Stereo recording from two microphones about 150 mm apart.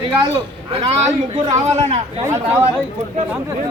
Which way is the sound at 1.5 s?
50° right (ahead or behind).